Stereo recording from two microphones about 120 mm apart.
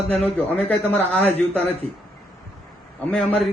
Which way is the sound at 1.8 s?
55° right (ahead or behind).